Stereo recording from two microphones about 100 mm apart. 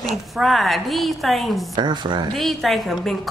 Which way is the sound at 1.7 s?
50° right (ahead or behind).